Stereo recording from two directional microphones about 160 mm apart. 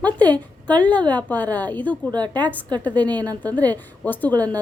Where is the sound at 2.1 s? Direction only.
25° right (ahead or behind).